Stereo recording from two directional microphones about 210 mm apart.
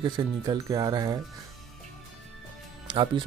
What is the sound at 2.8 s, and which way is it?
Speech, 20° right (ahead or behind).